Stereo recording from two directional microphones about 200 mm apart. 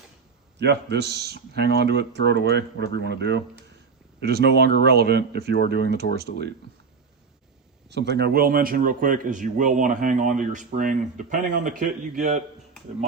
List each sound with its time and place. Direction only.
0.6 s speech: 60° right (ahead or behind)
7.9 s a man's voice: 60° right (ahead or behind); by 12.4 s 35° right (ahead or behind)